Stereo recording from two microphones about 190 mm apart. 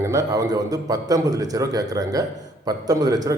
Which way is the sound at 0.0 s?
15° right (ahead or behind).